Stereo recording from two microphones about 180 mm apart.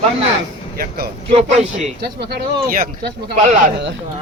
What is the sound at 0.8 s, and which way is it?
Speech, 60° right (ahead or behind).